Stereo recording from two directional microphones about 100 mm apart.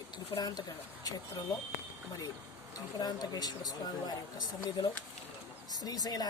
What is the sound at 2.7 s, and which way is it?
Speech, 40° left (ahead or behind).